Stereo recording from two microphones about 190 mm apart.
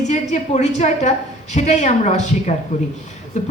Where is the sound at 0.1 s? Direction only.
35° left (ahead or behind).